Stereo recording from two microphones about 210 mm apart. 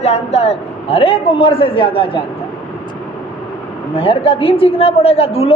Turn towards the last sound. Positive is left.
turn(degrees=30)  # may be behind; listen again after turning